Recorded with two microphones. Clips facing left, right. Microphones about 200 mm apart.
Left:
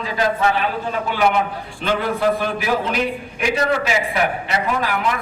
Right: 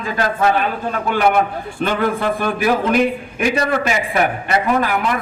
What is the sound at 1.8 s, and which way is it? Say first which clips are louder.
A man's voice: right 1 dB; 50° right (ahead or behind).